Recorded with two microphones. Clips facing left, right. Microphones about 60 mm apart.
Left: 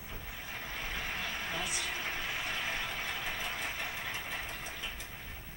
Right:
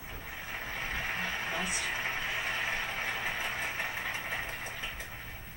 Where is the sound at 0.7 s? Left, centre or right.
Right.